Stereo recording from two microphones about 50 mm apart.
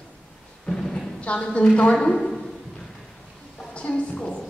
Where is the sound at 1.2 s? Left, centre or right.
Left.